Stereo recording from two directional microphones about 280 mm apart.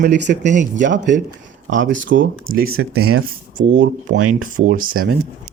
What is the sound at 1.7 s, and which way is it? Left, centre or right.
Speech, right.